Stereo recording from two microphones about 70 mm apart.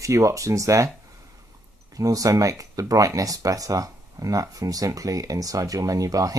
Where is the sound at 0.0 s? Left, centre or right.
Right.